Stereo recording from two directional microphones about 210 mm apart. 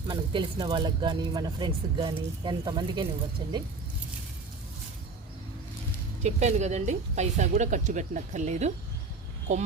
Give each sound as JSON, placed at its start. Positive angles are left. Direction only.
{"t": 0.1, "sound": "speech", "side_deg": -20}
{"t": 6.2, "sound": "speech", "side_deg": -35}